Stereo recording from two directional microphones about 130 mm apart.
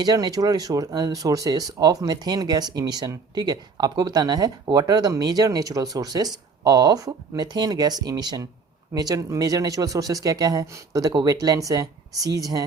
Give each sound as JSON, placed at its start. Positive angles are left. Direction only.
{"t": 0.0, "sound": "speech", "side_deg": -30}